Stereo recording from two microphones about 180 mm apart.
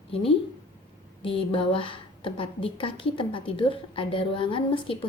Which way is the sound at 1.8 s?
30° left (ahead or behind).